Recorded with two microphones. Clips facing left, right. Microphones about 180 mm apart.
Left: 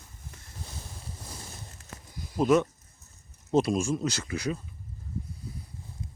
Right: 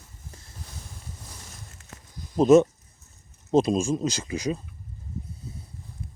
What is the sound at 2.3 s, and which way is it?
Speech, 25° right (ahead or behind).